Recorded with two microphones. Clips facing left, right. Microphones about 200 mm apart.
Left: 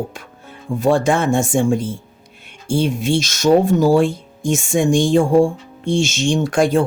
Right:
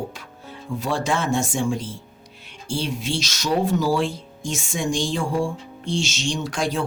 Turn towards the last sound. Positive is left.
turn(degrees=50)  # may be behind; listen again after turning